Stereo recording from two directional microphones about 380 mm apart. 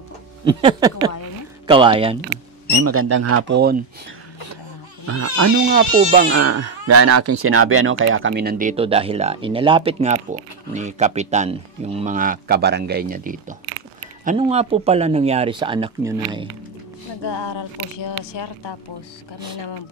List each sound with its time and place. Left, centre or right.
0.5 s speech: centre
2.7 s speech: right
5.0 s speech: right
5.9 s speech: centre
6.3 s speech: right; by 16.4 s centre
17.2 s speech: left